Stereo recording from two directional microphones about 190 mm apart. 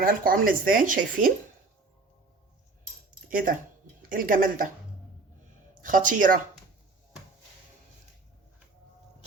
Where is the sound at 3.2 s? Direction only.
45° right (ahead or behind).